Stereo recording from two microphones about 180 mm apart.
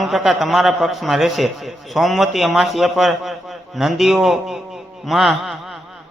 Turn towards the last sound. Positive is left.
turn(degrees=0)  # may be behind; listen again after turning